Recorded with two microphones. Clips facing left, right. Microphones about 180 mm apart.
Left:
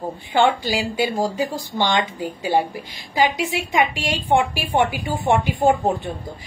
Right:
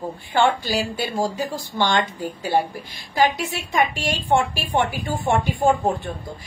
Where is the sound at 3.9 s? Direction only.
15° left (ahead or behind).